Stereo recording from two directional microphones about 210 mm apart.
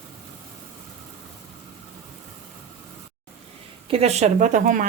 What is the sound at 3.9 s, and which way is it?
Speech, 30° right (ahead or behind).